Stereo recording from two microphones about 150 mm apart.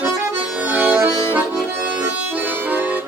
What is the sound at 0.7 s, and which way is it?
Music, 10° right (ahead or behind).